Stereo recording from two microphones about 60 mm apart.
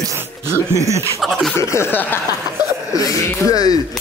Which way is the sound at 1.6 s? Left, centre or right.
Left.